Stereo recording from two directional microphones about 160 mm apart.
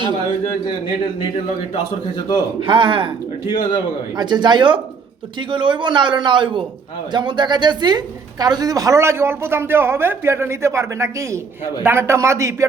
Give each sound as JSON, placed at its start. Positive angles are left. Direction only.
{"t": 2.6, "sound": "speech", "side_deg": -30}
{"t": 3.4, "sound": "a man's voice", "side_deg": 25}
{"t": 4.2, "sound": "a man's voice", "side_deg": -25}